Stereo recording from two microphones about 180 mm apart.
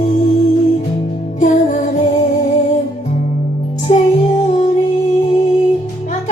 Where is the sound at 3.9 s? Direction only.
40° left (ahead or behind).